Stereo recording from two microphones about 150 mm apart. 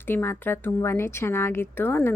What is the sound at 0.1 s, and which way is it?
A woman's voice, 15° left (ahead or behind).